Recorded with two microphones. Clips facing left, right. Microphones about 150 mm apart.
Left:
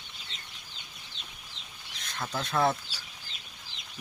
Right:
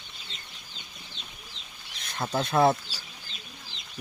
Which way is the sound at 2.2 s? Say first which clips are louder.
Right 6 dB; 30° right (ahead or behind).